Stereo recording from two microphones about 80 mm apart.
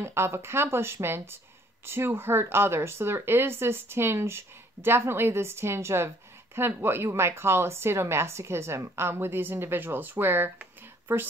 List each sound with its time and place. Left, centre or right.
0.0 s speech: right